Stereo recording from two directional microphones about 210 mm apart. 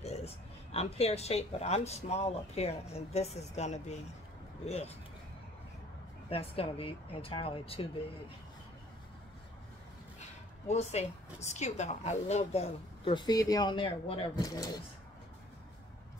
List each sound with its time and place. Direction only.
0.0 s a man's voice: 30° left (ahead or behind)
6.2 s speech: 25° left (ahead or behind)
10.7 s speech: 30° left (ahead or behind)